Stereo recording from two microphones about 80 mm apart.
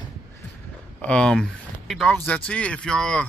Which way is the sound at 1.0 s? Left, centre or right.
Centre.